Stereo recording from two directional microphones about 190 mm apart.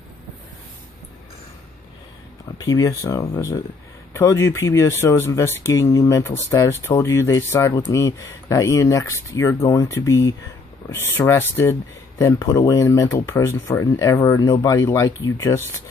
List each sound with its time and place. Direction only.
2.6 s speech: 20° left (ahead or behind)